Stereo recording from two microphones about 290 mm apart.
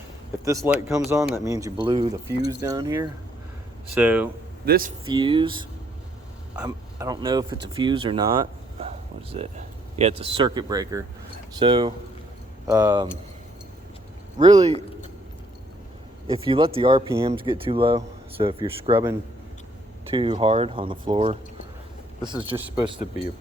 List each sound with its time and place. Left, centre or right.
0.4 s speech: centre
4.6 s speech: right
5.0 s speech: centre
14.3 s speech: centre
16.2 s speech: centre
20.1 s speech: centre
22.5 s speech: centre